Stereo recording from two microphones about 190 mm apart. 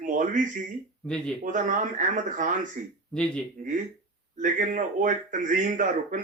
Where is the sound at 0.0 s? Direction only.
45° right (ahead or behind).